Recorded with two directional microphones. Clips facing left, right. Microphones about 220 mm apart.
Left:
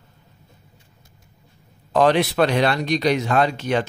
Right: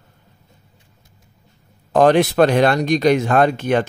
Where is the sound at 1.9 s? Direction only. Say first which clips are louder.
Right 4 dB; 45° right (ahead or behind).